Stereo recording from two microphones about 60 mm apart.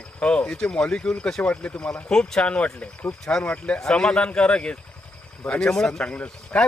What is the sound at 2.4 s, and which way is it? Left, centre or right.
Speech, left.